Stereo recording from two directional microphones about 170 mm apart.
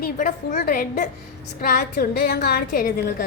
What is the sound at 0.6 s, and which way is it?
A woman's voice, 65° left (ahead or behind).